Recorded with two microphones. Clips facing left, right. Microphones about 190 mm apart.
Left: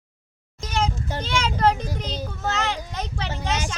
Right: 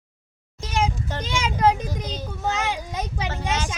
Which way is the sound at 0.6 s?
10° right (ahead or behind).